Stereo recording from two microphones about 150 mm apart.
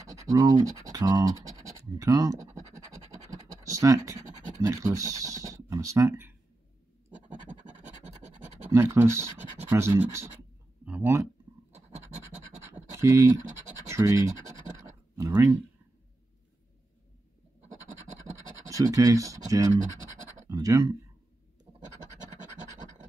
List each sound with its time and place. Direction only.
0.1 s speech: 20° right (ahead or behind)
3.3 s scratch: 25° right (ahead or behind)
7.5 s scratch: 10° left (ahead or behind)
8.6 s speech: 15° right (ahead or behind)
12.6 s scratch: 15° right (ahead or behind)
13.8 s speech: 20° right (ahead or behind)
18.7 s speech: 25° right (ahead or behind)
21.7 s scratch: 45° right (ahead or behind)